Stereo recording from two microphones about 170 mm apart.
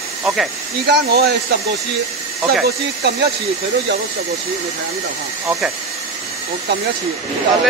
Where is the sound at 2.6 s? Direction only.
70° right (ahead or behind).